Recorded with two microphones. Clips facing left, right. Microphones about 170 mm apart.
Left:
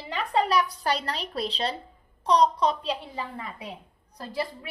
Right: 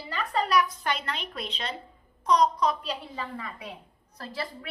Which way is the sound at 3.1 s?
20° left (ahead or behind).